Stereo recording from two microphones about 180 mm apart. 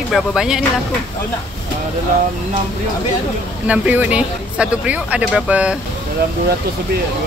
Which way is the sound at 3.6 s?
5° right (ahead or behind).